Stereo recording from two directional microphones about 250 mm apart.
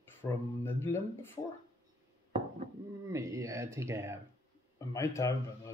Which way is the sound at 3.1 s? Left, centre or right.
Centre.